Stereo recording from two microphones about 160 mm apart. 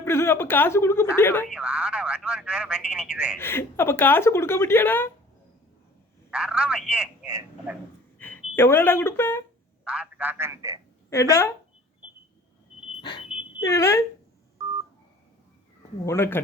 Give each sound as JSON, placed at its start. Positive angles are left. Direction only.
{"t": 0.0, "sound": "a woman's voice", "side_deg": 15}
{"t": 1.5, "sound": "speech", "side_deg": -5}
{"t": 3.3, "sound": "a woman's voice", "side_deg": 15}
{"t": 6.3, "sound": "speech", "side_deg": -5}
{"t": 7.3, "sound": "a sound", "side_deg": -15}
{"t": 8.2, "sound": "a sound", "side_deg": 10}
{"t": 8.5, "sound": "a woman's voice", "side_deg": 15}
{"t": 9.8, "sound": "a man's voice", "side_deg": -5}
{"t": 11.1, "sound": "a woman's voice", "side_deg": 15}
{"t": 13.0, "sound": "smoke detector", "side_deg": 30}
{"t": 13.6, "sound": "a woman's voice", "side_deg": 20}
{"t": 16.0, "sound": "a woman's voice", "side_deg": 15}